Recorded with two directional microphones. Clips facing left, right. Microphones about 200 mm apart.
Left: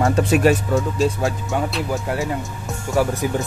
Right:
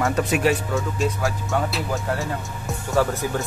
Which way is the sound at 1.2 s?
20° left (ahead or behind).